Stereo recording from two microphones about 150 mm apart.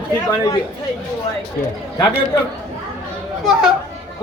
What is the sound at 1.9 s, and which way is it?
Speech, 25° left (ahead or behind).